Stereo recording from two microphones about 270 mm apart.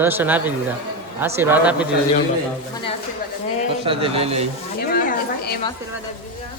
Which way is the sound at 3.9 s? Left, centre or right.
Right.